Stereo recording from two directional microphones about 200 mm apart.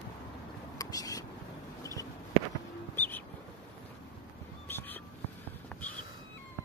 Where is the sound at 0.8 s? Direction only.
15° left (ahead or behind).